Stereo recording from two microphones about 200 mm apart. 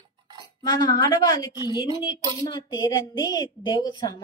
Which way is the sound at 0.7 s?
20° left (ahead or behind).